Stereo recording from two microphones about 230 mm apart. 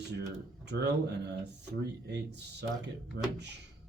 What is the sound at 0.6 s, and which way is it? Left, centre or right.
Speech, right.